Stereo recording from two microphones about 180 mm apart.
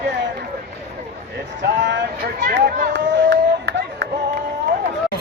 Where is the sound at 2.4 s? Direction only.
65° right (ahead or behind).